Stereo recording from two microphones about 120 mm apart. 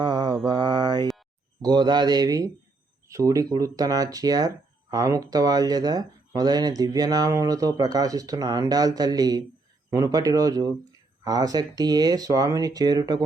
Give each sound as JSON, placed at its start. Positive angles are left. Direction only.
{"t": 0.0, "sound": "mantra", "side_deg": -35}
{"t": 1.6, "sound": "speech", "side_deg": -35}